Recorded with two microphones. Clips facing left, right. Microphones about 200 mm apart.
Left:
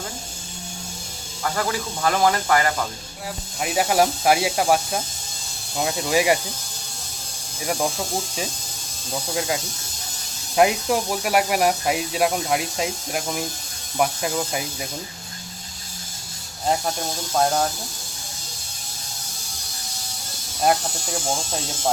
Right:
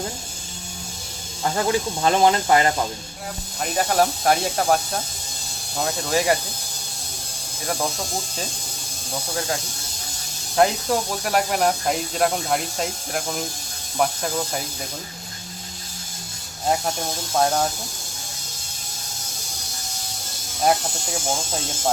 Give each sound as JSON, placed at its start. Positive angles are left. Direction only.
{"t": 1.5, "sound": "speech", "side_deg": -25}
{"t": 3.6, "sound": "speech", "side_deg": 10}
{"t": 10.5, "sound": "speech", "side_deg": 10}
{"t": 17.3, "sound": "speech", "side_deg": 0}
{"t": 20.7, "sound": "speech", "side_deg": -5}